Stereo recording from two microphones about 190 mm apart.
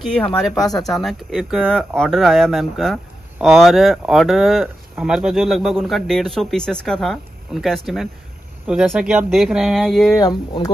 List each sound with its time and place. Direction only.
0.0 s speech: 5° left (ahead or behind)
10.2 s speech: 20° left (ahead or behind)